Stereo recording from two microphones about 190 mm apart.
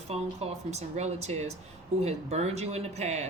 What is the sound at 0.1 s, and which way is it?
Speech, 35° right (ahead or behind).